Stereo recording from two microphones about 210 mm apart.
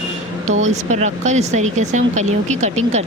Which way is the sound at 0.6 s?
35° right (ahead or behind).